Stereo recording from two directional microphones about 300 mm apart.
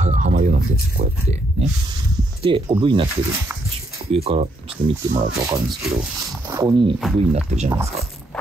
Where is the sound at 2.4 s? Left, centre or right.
Centre.